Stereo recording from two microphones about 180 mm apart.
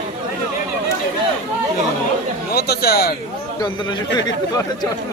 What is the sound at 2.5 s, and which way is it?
Speech, 60° left (ahead or behind).